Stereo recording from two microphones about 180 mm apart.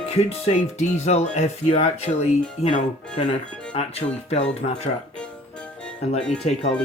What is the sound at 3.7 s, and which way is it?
Speech, 35° left (ahead or behind).